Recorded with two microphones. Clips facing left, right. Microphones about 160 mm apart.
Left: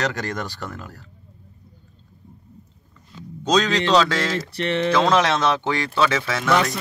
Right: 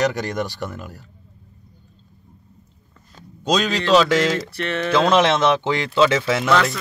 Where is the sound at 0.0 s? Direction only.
15° right (ahead or behind).